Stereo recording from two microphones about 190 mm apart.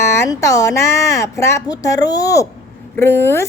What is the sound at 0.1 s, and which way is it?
A child's voice, 15° left (ahead or behind).